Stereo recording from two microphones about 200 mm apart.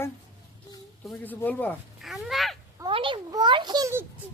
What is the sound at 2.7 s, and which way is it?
A child's voice, 25° right (ahead or behind).